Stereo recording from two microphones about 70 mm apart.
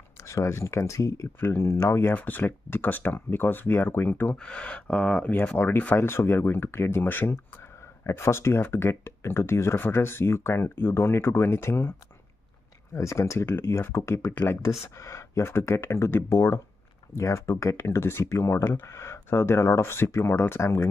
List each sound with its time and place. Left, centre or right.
0.2 s speech: left
4.4 s speech: centre
5.3 s speech: left
12.9 s speech: left
14.3 s speech: left
15.0 s speech: left